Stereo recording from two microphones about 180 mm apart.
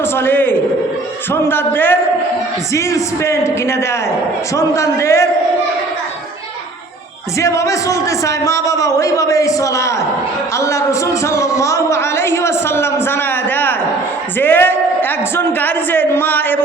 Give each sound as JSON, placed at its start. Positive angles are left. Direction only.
{"t": 0.2, "sound": "speech", "side_deg": 10}
{"t": 7.3, "sound": "speech", "side_deg": 15}
{"t": 14.3, "sound": "speech", "side_deg": 10}